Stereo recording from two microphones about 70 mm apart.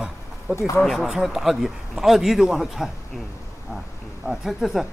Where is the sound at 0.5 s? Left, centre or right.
Left.